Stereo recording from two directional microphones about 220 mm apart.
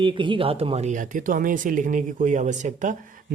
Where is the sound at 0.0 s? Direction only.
20° right (ahead or behind).